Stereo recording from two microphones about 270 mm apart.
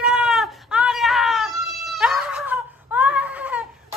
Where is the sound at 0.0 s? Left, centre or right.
Centre.